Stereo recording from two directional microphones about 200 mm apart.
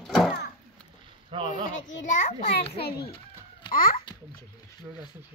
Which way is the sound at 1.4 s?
40° left (ahead or behind).